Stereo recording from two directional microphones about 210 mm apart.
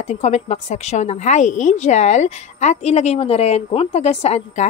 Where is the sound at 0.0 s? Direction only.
30° left (ahead or behind).